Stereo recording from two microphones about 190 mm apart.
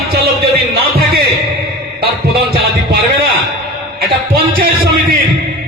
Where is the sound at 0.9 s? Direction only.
55° right (ahead or behind).